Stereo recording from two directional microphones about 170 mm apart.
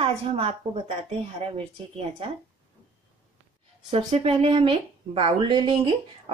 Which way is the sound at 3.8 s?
35° right (ahead or behind).